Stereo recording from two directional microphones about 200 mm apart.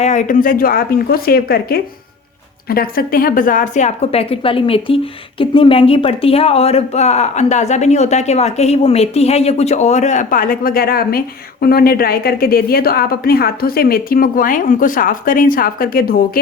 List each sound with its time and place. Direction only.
0.0 s a woman's voice: 35° left (ahead or behind)